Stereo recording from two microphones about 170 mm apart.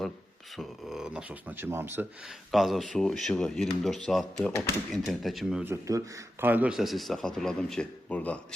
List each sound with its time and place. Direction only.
0.5 s speech: centre (ahead or behind)
2.5 s a man's voice: centre (ahead or behind)
5.6 s a man's voice: 15° right (ahead or behind); by 8.4 s 10° left (ahead or behind)